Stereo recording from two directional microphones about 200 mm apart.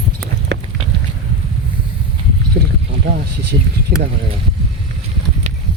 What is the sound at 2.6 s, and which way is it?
Rowboat, 50° right (ahead or behind).